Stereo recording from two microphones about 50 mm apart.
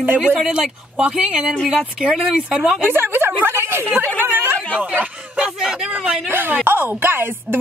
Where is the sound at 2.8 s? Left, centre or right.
Right.